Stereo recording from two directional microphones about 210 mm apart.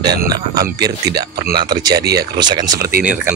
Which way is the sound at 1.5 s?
20° right (ahead or behind).